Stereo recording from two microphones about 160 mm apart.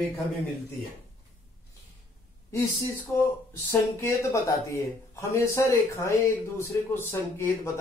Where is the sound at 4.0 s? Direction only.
20° left (ahead or behind).